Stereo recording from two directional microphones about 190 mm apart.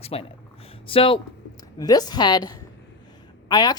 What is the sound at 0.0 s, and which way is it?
Speech, 30° left (ahead or behind).